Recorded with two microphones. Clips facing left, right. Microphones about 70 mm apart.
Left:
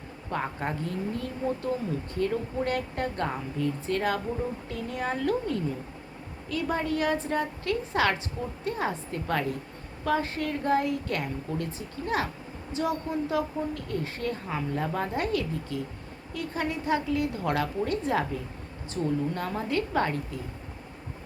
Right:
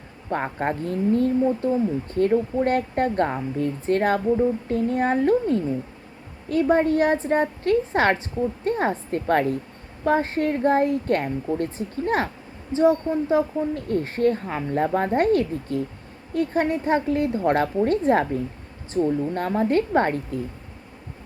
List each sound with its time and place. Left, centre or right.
0.3 s a woman's voice: right